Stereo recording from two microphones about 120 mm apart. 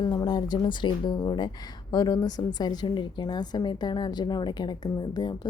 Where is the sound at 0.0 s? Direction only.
35° left (ahead or behind).